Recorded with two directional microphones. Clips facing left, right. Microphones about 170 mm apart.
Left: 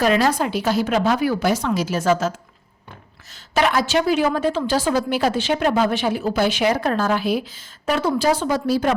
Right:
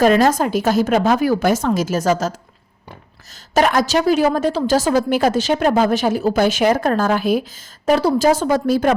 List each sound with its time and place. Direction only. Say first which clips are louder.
0.0 s a woman's voice: right 4 dB; 45° right (ahead or behind)
3.5 s a woman's voice: right 3 dB; 45° right (ahead or behind)